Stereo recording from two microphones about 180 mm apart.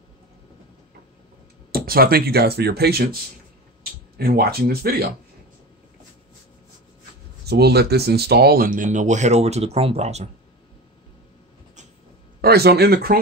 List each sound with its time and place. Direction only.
1.7 s speech: 55° right (ahead or behind)
4.2 s speech: 55° right (ahead or behind)
7.4 s speech: 65° right (ahead or behind); by 10.2 s 35° right (ahead or behind)
12.4 s speech: 60° right (ahead or behind)